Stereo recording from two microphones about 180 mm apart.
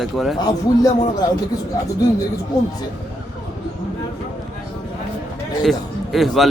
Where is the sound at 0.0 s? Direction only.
Centre (ahead or behind).